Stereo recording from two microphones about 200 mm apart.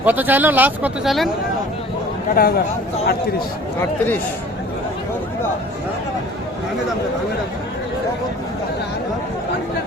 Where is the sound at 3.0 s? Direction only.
50° left (ahead or behind).